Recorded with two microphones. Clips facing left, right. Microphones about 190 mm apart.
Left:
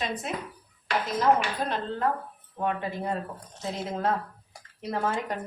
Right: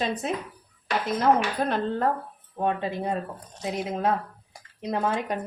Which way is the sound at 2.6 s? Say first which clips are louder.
Right 3 dB; 25° right (ahead or behind).